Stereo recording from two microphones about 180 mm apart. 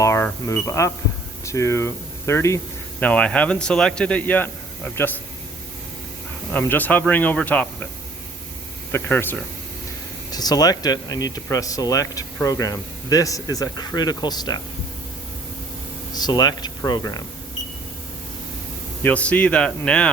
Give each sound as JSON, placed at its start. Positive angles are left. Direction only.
{"t": 0.0, "sound": "a sound", "side_deg": 15}
{"t": 0.4, "sound": "speech", "side_deg": 15}
{"t": 6.5, "sound": "speech", "side_deg": 10}
{"t": 8.9, "sound": "speech", "side_deg": 10}
{"t": 16.1, "sound": "speech", "side_deg": 20}
{"t": 19.0, "sound": "speech", "side_deg": 5}